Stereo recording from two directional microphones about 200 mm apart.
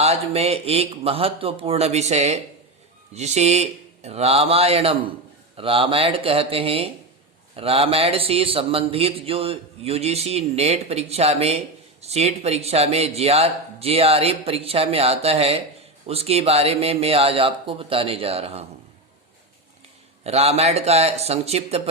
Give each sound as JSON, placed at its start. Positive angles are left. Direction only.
{"t": 0.0, "sound": "a man's voice", "side_deg": -30}
{"t": 20.2, "sound": "speech", "side_deg": -30}